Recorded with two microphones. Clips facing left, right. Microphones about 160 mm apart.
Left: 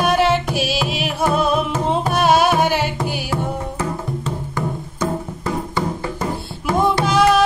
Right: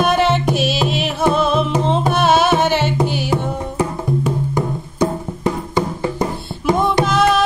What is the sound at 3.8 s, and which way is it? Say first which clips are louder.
Music: right 5 dB; 15° right (ahead or behind).